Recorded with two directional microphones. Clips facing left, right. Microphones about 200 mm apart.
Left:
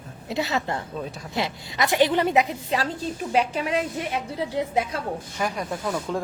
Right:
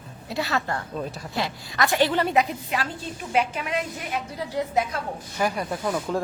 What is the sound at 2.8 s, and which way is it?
A woman's voice, 35° left (ahead or behind).